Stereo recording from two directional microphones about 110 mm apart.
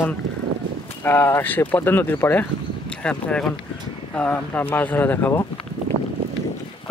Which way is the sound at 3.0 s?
10° left (ahead or behind).